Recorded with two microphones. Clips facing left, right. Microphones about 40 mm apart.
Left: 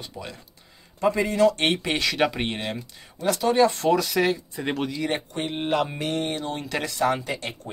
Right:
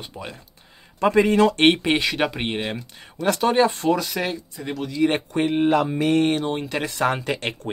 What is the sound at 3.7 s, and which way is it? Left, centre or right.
Speech, centre.